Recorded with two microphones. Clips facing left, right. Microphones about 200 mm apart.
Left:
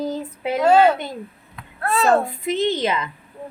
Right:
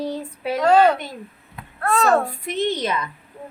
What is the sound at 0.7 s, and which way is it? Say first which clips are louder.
Speech: even; 25° left (ahead or behind).